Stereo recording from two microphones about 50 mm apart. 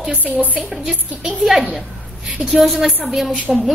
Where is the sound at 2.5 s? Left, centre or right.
Centre.